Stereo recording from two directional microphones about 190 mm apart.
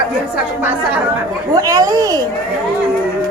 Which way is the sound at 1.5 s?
20° right (ahead or behind).